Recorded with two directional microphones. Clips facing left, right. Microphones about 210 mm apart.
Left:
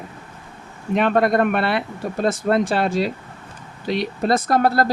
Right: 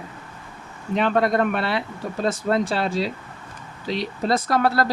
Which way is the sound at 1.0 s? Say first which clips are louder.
Left 3 dB; 60° left (ahead or behind).